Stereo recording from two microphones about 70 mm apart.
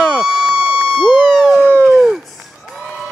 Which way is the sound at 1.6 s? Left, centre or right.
Right.